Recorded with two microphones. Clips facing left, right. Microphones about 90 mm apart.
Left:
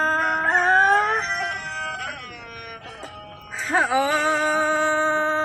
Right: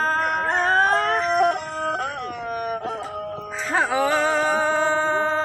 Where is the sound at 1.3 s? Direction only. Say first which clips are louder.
Right 8 dB; 35° right (ahead or behind).